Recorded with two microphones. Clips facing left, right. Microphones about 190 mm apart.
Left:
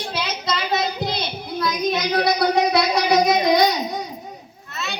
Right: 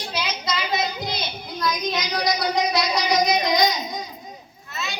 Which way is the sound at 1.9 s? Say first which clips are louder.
Left 4 dB; 60° left (ahead or behind).